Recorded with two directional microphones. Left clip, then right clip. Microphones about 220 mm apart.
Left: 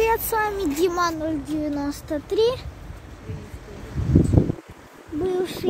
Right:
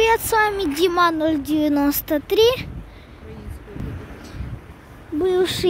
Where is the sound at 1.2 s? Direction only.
25° right (ahead or behind).